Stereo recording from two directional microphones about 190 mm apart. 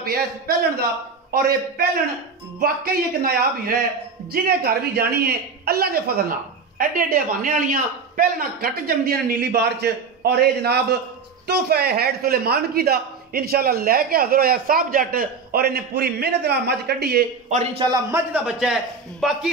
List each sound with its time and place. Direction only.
0.0 s a man's voice: 55° right (ahead or behind)
17.5 s a man's voice: 35° right (ahead or behind)
17.8 s a man's voice: 20° right (ahead or behind)
18.3 s a man's voice: 5° right (ahead or behind)